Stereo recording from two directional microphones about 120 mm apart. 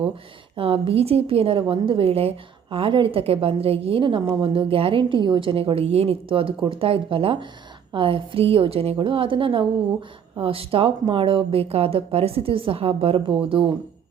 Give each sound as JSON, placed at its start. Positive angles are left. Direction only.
{"t": 0.5, "sound": "a woman's voice", "side_deg": -50}